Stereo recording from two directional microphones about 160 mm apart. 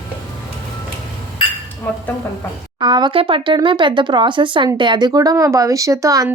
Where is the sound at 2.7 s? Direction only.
25° right (ahead or behind).